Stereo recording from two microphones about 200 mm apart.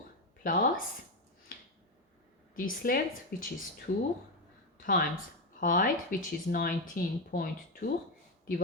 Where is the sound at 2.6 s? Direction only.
45° left (ahead or behind).